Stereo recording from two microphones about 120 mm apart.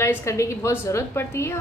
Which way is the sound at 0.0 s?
20° left (ahead or behind).